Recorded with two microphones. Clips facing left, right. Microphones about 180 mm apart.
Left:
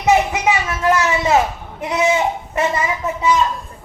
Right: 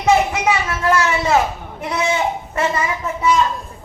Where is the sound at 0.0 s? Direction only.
20° left (ahead or behind).